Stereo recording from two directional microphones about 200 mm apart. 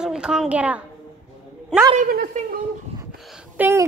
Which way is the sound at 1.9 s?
40° right (ahead or behind).